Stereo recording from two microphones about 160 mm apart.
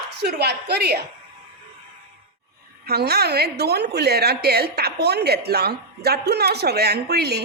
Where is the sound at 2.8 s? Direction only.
85° right.